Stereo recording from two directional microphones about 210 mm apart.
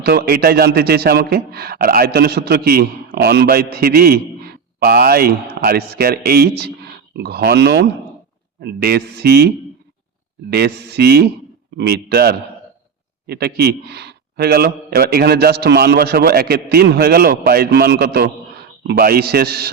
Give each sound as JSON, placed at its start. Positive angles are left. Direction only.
{"t": 0.0, "sound": "a man's voice", "side_deg": -50}
{"t": 10.5, "sound": "a man's voice", "side_deg": -50}